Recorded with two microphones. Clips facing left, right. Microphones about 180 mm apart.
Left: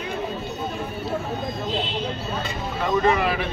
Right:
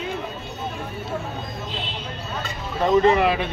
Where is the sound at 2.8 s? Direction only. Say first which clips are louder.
Right 4 dB; 20° right (ahead or behind).